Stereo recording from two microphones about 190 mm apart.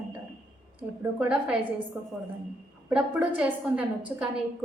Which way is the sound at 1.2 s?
5° right (ahead or behind).